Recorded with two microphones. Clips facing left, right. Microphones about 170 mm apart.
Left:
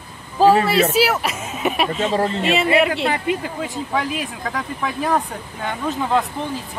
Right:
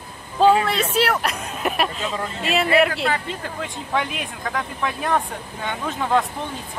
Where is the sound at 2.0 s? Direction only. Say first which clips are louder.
Left 8 dB; 35° left (ahead or behind).